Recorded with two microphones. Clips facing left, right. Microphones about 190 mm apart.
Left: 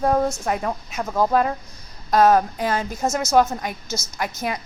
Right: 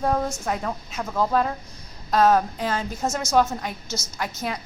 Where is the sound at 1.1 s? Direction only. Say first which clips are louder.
Left 3 dB; 10° left (ahead or behind).